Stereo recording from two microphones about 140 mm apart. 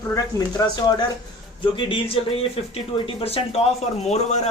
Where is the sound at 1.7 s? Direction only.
40° left (ahead or behind).